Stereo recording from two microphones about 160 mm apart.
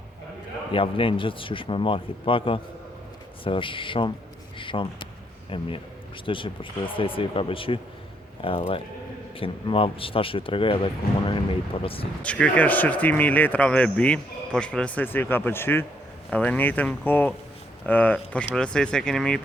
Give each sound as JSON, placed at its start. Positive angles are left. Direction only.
{"t": 0.7, "sound": "speech", "side_deg": 35}
{"t": 11.8, "sound": "speech", "side_deg": 35}
{"t": 12.2, "sound": "speech", "side_deg": 10}